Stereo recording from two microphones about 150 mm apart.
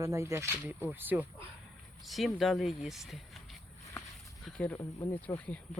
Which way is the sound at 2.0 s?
Centre (ahead or behind).